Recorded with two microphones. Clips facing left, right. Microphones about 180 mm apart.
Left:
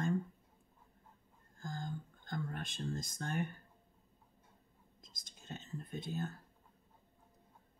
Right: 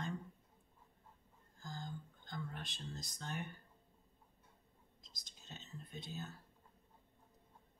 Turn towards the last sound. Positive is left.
turn(degrees=50)  # may be behind; listen again after turning